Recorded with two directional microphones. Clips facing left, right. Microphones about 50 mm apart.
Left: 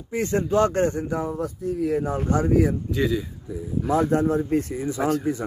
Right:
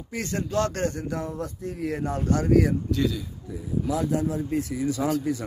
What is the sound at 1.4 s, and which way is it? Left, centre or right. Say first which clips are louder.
Speech: left 5 dB; centre.